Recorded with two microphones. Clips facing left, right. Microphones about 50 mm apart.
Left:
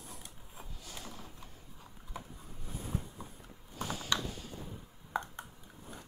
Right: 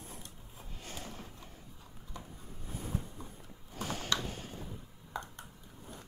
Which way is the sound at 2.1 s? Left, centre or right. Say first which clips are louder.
Left 3 dB; centre.